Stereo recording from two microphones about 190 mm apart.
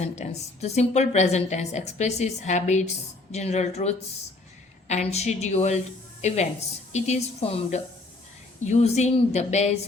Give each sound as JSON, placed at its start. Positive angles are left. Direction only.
{"t": 0.0, "sound": "a woman's voice", "side_deg": 35}